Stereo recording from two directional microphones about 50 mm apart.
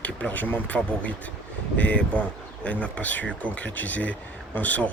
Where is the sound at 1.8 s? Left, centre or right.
Left.